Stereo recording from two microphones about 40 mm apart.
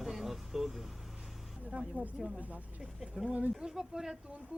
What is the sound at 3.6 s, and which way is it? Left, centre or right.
Speech, centre.